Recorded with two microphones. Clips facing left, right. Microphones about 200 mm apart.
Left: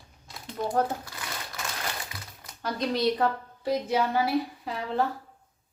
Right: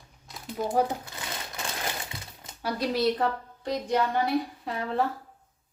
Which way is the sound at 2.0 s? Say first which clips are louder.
Right 2 dB; 25° right (ahead or behind).